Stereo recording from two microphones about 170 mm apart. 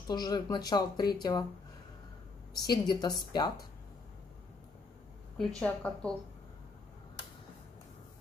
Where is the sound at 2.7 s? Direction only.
25° left (ahead or behind).